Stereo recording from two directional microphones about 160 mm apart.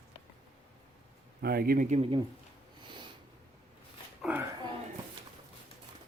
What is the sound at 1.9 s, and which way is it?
Speech, 35° right (ahead or behind).